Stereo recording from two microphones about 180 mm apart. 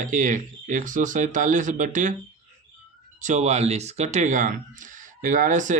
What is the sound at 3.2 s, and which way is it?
Speech, 45° right (ahead or behind).